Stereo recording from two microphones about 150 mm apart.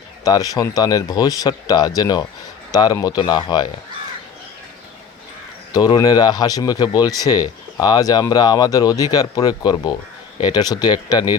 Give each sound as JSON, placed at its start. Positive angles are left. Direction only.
{"t": 0.3, "sound": "speech", "side_deg": 25}
{"t": 5.7, "sound": "speech", "side_deg": 25}